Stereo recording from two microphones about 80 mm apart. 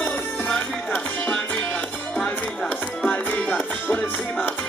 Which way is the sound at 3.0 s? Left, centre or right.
Left.